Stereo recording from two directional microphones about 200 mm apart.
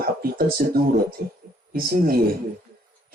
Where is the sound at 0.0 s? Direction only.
50° right (ahead or behind).